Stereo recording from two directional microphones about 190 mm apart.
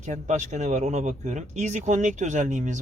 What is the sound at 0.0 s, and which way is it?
A man's voice, 40° right (ahead or behind).